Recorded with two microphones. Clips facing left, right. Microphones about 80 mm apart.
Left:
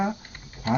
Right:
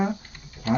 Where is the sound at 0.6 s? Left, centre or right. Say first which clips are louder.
Right 1 dB; left.